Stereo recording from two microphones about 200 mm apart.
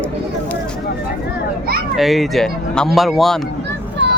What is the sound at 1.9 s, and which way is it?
Speech, centre (ahead or behind).